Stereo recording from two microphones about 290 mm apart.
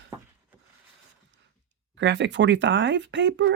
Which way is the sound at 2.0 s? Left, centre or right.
Right.